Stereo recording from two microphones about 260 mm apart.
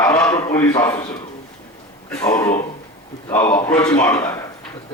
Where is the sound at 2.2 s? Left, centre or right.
Centre.